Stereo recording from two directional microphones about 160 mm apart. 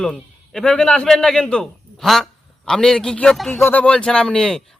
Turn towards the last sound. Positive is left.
turn(degrees=5)  # may be behind; listen again after turning